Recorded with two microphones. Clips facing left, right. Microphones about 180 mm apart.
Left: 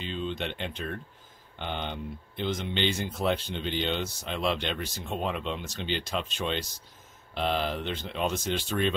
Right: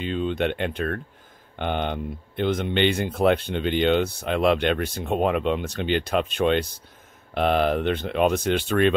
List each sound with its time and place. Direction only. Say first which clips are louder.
0.0 s speech: right 8 dB; 55° right (ahead or behind)